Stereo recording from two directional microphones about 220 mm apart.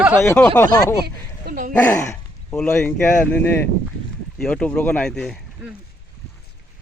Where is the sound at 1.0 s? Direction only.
40° right (ahead or behind).